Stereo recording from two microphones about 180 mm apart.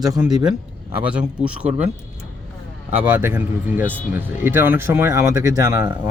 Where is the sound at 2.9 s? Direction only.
10° right (ahead or behind).